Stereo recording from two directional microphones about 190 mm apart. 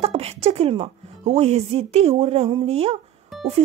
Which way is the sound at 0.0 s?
30° right (ahead or behind).